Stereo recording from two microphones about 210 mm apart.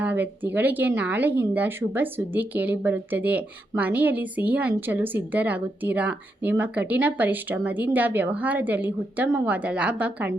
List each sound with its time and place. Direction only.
0.0 s speech: 10° right (ahead or behind)